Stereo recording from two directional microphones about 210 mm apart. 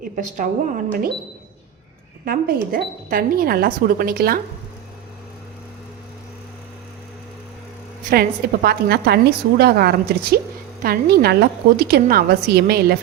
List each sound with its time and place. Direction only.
0.0 s speech: 40° right (ahead or behind)
2.2 s a woman's voice: 45° right (ahead or behind)
8.1 s a woman's voice: 45° right (ahead or behind)